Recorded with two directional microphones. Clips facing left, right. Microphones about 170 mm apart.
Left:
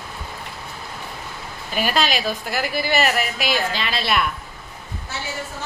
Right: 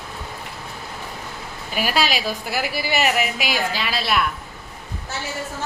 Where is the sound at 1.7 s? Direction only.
5° right (ahead or behind).